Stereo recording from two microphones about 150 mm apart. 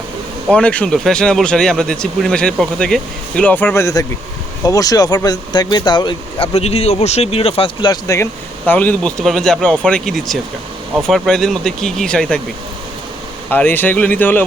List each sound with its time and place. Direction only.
0.5 s speech: 10° left (ahead or behind); by 6.5 s 30° left (ahead or behind)
6.5 s speech: 45° left (ahead or behind)
8.0 s speech: 20° left (ahead or behind)
8.6 s speech: 10° left (ahead or behind)
13.5 s speech: 15° left (ahead or behind)